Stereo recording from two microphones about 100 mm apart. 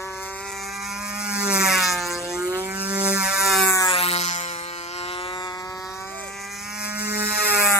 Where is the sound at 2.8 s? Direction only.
15° right (ahead or behind).